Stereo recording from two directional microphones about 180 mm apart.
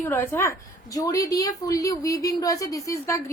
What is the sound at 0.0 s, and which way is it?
A woman's voice, 15° left (ahead or behind).